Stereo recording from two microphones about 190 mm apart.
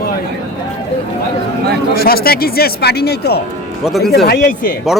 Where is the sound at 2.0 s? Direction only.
55° left (ahead or behind).